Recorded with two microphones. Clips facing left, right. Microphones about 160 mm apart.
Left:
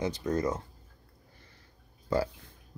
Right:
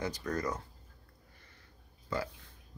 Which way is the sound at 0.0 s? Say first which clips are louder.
Left 5 dB; 20° left (ahead or behind).